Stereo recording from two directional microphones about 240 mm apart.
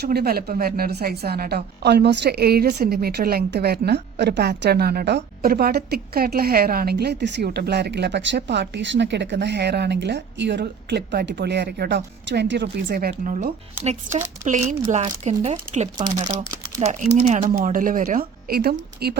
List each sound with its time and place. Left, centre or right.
0.0 s speech: right; by 16.2 s centre
16.7 s speech: right